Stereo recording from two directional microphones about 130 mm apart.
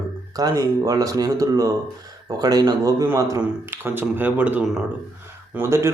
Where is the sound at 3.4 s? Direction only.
15° right (ahead or behind).